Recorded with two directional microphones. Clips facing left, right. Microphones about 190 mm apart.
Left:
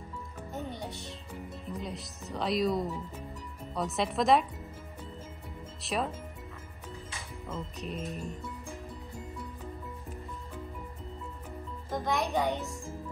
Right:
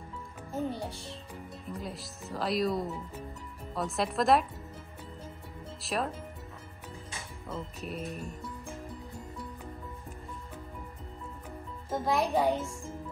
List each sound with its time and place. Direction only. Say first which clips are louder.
1.8 s speech: left 1 dB; 5° right (ahead or behind)
5.8 s speech: even; centre (ahead or behind)
7.4 s speech: even; centre (ahead or behind)
11.9 s a child's voice: right 2 dB; 5° right (ahead or behind)
12.2 s a child's voice: right 4 dB; 30° right (ahead or behind)